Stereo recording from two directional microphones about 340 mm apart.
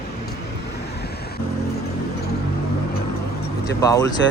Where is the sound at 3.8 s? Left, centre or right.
Centre.